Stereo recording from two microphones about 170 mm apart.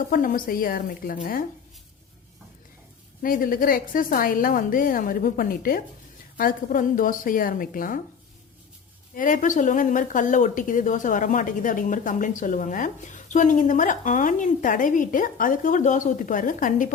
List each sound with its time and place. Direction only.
0.1 s a woman's voice: 55° left (ahead or behind)
3.2 s a woman's voice: 55° left (ahead or behind)
9.1 s speech: 50° left (ahead or behind)